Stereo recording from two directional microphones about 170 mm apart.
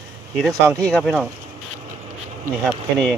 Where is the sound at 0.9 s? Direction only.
Centre (ahead or behind).